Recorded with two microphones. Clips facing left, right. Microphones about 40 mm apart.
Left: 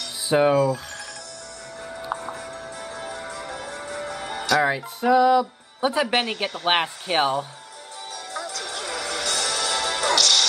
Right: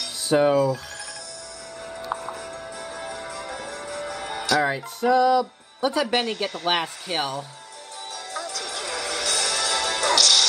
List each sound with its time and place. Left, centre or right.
0.3 s speech: centre
2.0 s music: centre
4.6 s speech: centre
6.6 s speech: left
8.3 s music: centre